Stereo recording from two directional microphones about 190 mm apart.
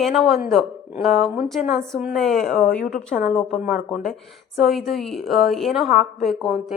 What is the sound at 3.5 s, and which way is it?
Speech, 40° left (ahead or behind).